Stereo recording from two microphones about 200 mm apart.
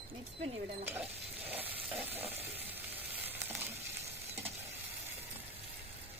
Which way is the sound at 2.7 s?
10° right (ahead or behind).